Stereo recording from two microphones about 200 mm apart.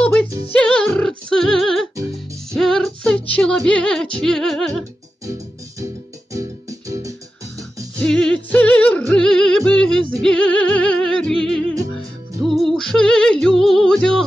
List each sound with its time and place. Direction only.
0.0 s music: 5° left (ahead or behind)
6.9 s music: 15° right (ahead or behind)
8.0 s music: 5° left (ahead or behind)
12.4 s music: centre (ahead or behind)